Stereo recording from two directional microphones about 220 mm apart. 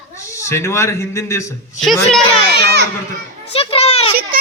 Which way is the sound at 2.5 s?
45° right (ahead or behind).